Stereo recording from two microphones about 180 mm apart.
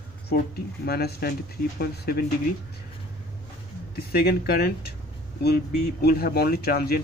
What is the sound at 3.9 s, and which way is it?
Speech, 60° left (ahead or behind).